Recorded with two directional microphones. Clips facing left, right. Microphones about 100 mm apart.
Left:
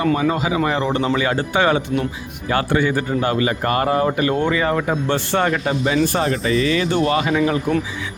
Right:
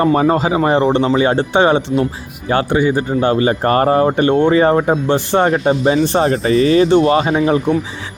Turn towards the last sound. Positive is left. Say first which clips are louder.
# right 4 dB
turn(degrees=-30)  # may be behind; listen again after turning